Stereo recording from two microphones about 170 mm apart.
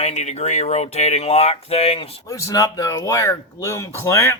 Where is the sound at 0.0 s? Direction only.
40° left (ahead or behind).